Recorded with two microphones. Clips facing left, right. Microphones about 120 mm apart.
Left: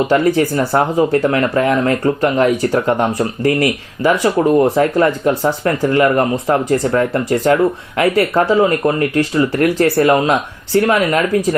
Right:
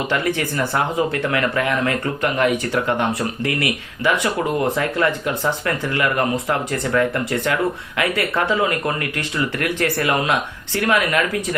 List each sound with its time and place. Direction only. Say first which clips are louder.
0.1 s speech: left 8 dB; 35° left (ahead or behind)